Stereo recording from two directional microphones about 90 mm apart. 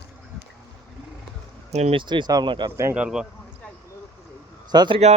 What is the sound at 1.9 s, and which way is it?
Speech, 60° right (ahead or behind).